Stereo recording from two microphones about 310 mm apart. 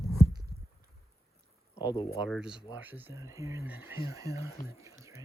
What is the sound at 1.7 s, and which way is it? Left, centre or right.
Speech, centre.